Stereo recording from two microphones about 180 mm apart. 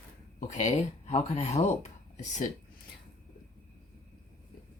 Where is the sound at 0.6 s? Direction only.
40° left (ahead or behind).